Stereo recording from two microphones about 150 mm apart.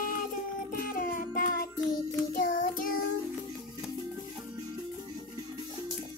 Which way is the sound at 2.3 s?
65° left (ahead or behind).